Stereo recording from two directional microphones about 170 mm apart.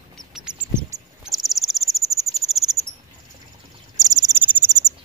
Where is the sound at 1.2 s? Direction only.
Centre (ahead or behind).